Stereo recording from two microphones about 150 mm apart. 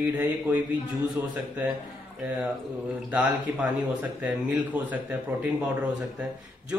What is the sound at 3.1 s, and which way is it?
Speech, 10° right (ahead or behind).